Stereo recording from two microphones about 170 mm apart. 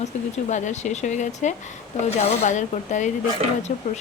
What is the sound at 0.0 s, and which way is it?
Speech, 45° left (ahead or behind).